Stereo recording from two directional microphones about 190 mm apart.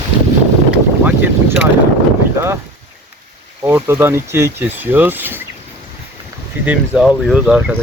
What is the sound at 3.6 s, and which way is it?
Speech, 15° right (ahead or behind).